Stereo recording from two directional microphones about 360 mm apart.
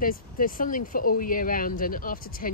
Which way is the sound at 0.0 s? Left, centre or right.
Left.